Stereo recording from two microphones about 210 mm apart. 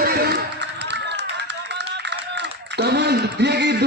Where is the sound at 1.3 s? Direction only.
55° right (ahead or behind).